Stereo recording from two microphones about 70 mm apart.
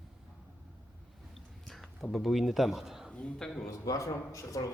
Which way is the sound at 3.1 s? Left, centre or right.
Centre.